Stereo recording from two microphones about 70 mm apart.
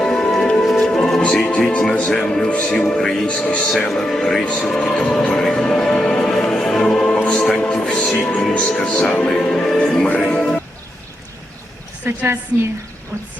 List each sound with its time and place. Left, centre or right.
0.0 s music: centre
2.0 s speech: centre
12.0 s a woman's voice: right